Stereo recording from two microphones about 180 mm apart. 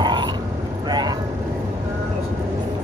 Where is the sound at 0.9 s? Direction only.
25° right (ahead or behind).